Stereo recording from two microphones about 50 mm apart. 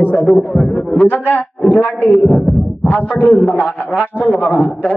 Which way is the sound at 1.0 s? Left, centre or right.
Left.